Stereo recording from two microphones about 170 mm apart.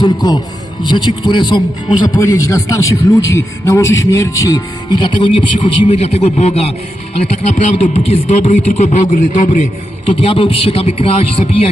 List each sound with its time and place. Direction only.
0.0 s a man's voice: 25° left (ahead or behind)
5.2 s a man's voice: 35° left (ahead or behind); by 9.6 s 50° left (ahead or behind)
10.1 s a man's voice: 30° left (ahead or behind)